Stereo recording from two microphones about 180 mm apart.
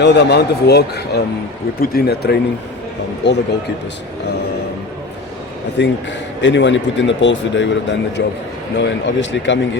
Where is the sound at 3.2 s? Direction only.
75° left (ahead or behind).